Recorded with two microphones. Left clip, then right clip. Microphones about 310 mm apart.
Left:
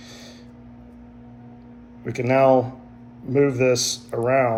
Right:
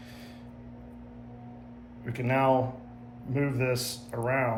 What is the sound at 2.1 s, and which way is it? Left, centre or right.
Speech, centre.